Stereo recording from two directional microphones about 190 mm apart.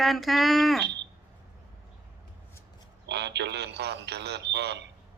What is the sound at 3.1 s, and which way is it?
Speech, 65° right (ahead or behind).